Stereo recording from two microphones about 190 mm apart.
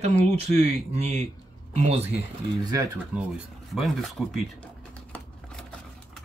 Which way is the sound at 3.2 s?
5° right (ahead or behind).